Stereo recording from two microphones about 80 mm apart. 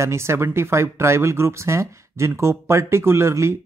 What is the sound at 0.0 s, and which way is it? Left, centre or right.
Speech, right.